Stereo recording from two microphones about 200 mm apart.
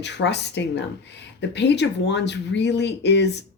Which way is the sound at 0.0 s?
60° left (ahead or behind).